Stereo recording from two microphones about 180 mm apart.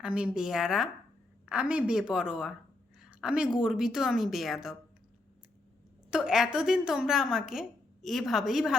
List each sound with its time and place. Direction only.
0.0 s a woman's voice: 5° right (ahead or behind)
6.1 s a woman's voice: 5° right (ahead or behind)